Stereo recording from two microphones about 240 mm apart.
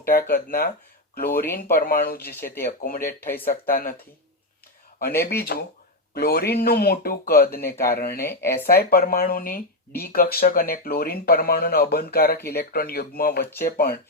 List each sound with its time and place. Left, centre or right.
0.0 s speech: left
2.3 s speech: centre
2.8 s speech: left
3.2 s speech: centre
3.5 s speech: left
4.9 s speech: left
8.3 s speech: centre
8.6 s speech: left